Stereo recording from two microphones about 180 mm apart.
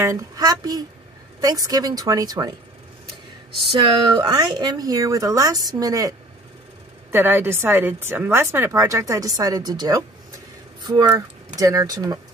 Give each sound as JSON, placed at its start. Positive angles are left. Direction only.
{"t": 0.0, "sound": "speech", "side_deg": -20}
{"t": 3.8, "sound": "a woman's voice", "side_deg": -25}